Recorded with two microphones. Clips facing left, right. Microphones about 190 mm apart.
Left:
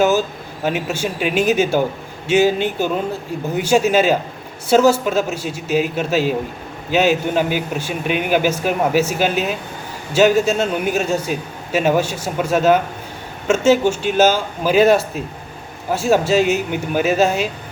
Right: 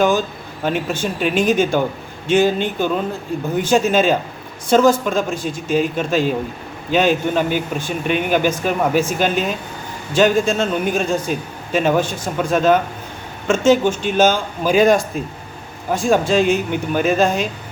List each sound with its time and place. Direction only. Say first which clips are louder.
0.0 s a man's voice: left 1 dB; 5° left (ahead or behind)